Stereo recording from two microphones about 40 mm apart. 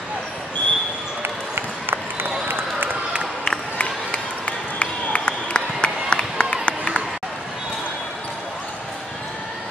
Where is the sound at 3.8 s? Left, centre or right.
Left.